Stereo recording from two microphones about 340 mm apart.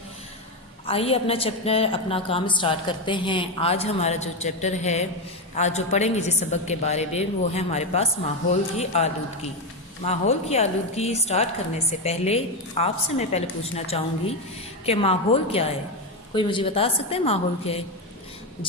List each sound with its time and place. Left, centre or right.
0.9 s a woman's voice: centre